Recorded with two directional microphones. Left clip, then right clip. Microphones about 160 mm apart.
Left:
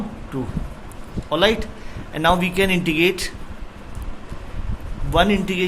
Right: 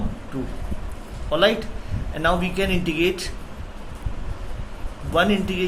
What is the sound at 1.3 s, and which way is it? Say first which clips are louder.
A man's voice: left 1 dB; 40° left (ahead or behind).